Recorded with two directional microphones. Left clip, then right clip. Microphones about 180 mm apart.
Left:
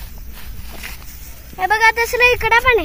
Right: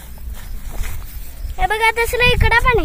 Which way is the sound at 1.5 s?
85° right.